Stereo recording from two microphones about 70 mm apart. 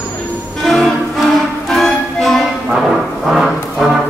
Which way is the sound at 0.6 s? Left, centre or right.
Centre.